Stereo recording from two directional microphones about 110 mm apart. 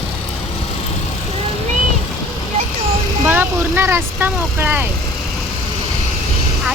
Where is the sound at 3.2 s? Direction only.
20° right (ahead or behind).